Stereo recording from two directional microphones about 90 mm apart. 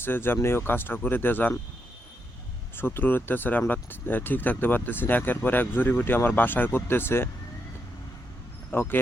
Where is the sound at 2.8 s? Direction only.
25° left (ahead or behind).